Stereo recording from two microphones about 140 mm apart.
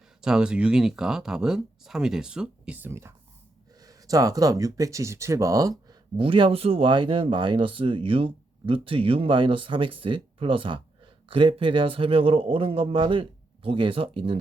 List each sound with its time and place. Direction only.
0.2 s speech: 5° right (ahead or behind); by 6.0 s 25° right (ahead or behind)
6.1 s speech: 35° right (ahead or behind)